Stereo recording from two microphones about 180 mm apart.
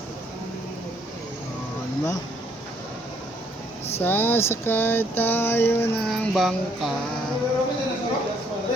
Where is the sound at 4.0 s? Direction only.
10° left (ahead or behind).